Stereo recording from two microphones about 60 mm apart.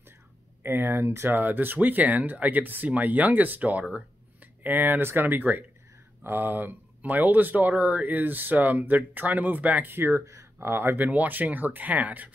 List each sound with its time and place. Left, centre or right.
0.7 s speech: right
1.4 s speech: right
10.2 s speech: right
11.1 s speech: right